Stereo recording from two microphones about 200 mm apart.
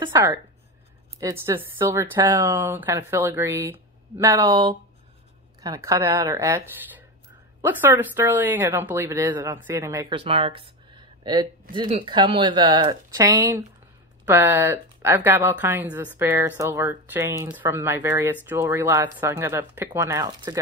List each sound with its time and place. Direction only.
0.0 s speech: 20° right (ahead or behind)
10.1 s speech: 25° right (ahead or behind)